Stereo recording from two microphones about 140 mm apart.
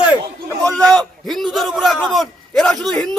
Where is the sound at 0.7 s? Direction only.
5° left (ahead or behind).